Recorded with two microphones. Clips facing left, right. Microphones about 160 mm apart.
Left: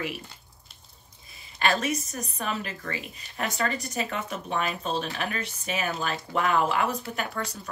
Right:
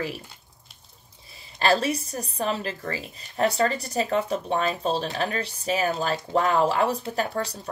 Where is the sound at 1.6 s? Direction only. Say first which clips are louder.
Right 4 dB; 30° right (ahead or behind).